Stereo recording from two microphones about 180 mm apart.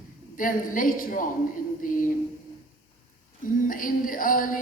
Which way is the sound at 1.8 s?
50° left (ahead or behind).